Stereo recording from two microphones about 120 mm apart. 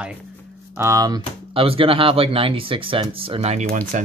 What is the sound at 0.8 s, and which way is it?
Speech, 25° right (ahead or behind).